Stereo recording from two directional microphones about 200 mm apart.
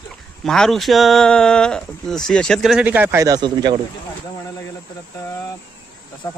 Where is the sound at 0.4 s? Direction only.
Centre (ahead or behind); by 3.8 s 20° right (ahead or behind).